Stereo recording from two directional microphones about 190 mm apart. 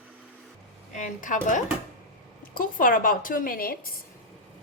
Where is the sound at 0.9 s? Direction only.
40° left (ahead or behind).